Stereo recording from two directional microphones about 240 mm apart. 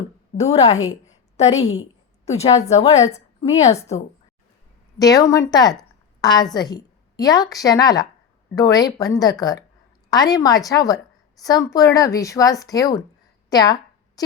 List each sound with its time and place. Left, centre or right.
0.3 s a woman's voice: left
4.9 s a woman's voice: centre
14.2 s a sound: centre